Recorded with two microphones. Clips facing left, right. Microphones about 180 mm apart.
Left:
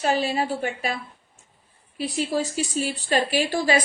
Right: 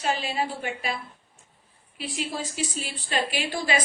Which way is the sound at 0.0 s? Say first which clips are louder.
Left 4 dB; 40° left (ahead or behind).